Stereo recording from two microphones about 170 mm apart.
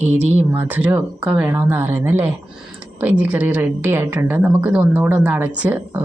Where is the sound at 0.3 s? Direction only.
10° right (ahead or behind).